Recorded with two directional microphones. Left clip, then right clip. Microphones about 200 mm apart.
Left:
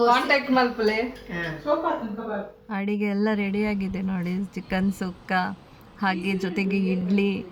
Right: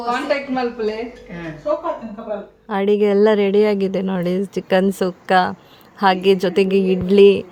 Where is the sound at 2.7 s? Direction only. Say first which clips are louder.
Right 13 dB; 15° right (ahead or behind).